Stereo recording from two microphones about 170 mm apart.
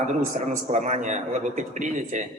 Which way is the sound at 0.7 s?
45° right (ahead or behind).